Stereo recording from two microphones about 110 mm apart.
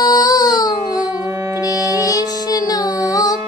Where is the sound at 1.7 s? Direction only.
30° left (ahead or behind).